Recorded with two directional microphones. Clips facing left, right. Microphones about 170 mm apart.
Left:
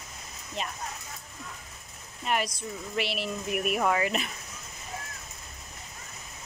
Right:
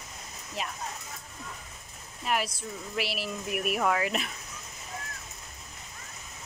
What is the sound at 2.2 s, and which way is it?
Speech, centre (ahead or behind).